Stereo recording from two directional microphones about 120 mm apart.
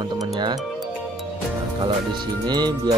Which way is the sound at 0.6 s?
Centre (ahead or behind).